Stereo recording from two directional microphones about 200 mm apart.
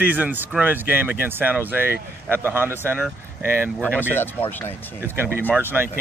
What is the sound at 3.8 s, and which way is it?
Speech, 10° left (ahead or behind).